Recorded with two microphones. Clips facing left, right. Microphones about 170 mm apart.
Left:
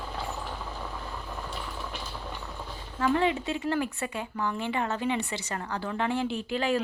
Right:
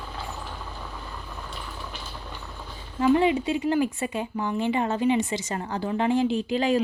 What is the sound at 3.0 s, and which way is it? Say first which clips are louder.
Speech: right 5 dB; 15° right (ahead or behind).